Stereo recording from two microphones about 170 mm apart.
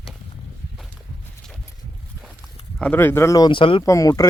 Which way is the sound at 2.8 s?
10° left (ahead or behind).